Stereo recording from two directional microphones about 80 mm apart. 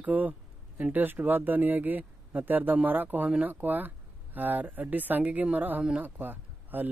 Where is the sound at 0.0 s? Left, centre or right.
Right.